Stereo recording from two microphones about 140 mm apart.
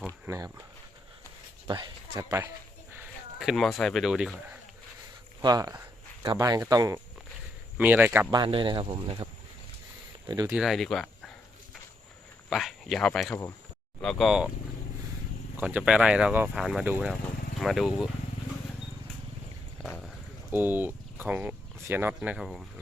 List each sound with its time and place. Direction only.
0.3 s speech: 25° right (ahead or behind)
1.6 s speech: 35° right (ahead or behind)
2.1 s speech: 20° right (ahead or behind)
3.3 s speech: centre (ahead or behind)
5.4 s speech: 30° right (ahead or behind)
7.8 s speech: 10° right (ahead or behind)
8.3 s speech: 35° right (ahead or behind)
10.2 s speech: 25° right (ahead or behind)
10.5 s speech: 5° right (ahead or behind)
12.5 s speech: centre (ahead or behind)
15.5 s speech: 10° right (ahead or behind)
16.8 s speech: 15° right (ahead or behind)
17.6 s speech: centre (ahead or behind)
20.5 s speech: 15° right (ahead or behind)